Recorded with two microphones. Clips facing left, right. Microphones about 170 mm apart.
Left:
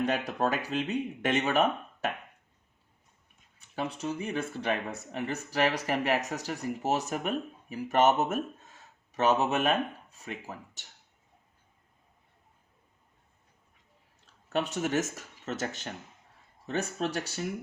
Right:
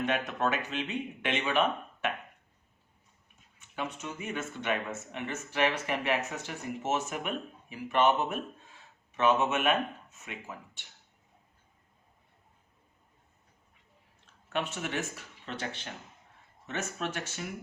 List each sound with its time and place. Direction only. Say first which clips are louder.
0.0 s speech: left 2 dB; 35° left (ahead or behind)
3.6 s speech: left 4 dB; 35° left (ahead or behind)
14.5 s speech: left 5 dB; 40° left (ahead or behind)